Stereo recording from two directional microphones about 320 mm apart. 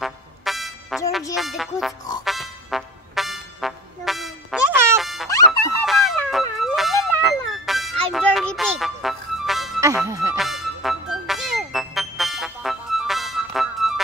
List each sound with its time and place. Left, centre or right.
0.0 s music: centre